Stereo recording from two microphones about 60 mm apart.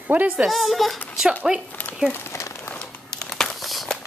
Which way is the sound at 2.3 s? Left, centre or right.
Left.